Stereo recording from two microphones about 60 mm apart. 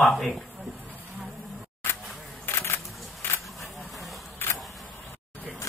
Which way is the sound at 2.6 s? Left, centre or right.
Left.